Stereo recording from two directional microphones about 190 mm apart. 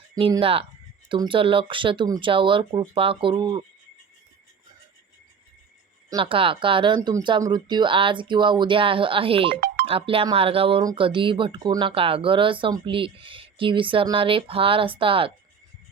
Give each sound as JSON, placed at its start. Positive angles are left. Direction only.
{"t": 0.2, "sound": "speech", "side_deg": -30}
{"t": 6.1, "sound": "speech", "side_deg": -25}